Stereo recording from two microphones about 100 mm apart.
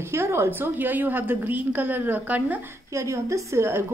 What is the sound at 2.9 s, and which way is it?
Speech, 30° right (ahead or behind).